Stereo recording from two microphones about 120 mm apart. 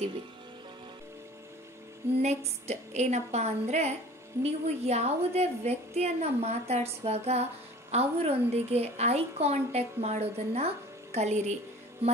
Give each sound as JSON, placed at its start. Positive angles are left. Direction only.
{"t": 2.2, "sound": "a woman's voice", "side_deg": -65}